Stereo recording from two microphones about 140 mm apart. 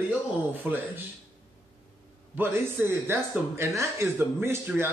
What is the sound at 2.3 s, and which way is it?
Speech, 15° right (ahead or behind).